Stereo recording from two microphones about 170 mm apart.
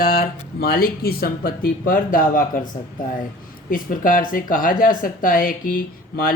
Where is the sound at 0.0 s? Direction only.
60° left (ahead or behind).